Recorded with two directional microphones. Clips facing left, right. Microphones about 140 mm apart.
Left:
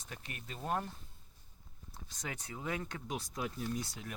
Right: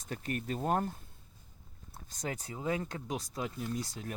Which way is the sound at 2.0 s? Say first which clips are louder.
Right 5 dB; 40° right (ahead or behind).